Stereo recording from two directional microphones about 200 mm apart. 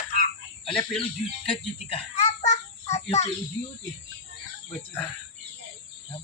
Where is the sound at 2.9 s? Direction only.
35° left (ahead or behind).